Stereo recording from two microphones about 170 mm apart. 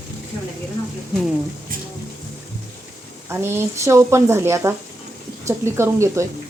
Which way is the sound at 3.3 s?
15° right (ahead or behind).